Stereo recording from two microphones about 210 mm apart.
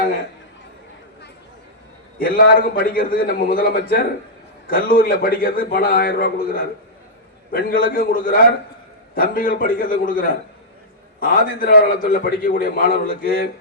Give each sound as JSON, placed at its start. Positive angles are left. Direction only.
{"t": 2.1, "sound": "a man's voice", "side_deg": 45}